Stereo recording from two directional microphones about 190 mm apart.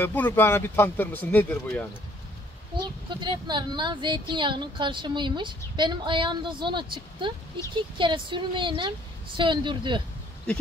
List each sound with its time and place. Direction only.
0.0 s speech: 10° left (ahead or behind)
3.1 s speech: 25° right (ahead or behind)